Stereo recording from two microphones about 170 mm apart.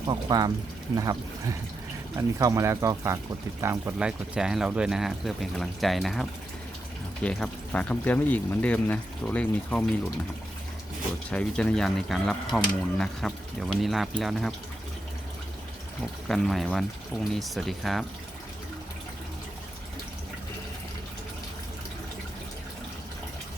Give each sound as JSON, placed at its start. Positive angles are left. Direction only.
{"t": 0.0, "sound": "speech", "side_deg": -25}
{"t": 3.9, "sound": "speech", "side_deg": -5}
{"t": 11.3, "sound": "speech", "side_deg": 5}
{"t": 16.3, "sound": "speech", "side_deg": 0}